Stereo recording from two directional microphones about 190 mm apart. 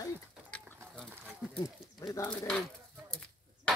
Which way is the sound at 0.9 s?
5° right (ahead or behind).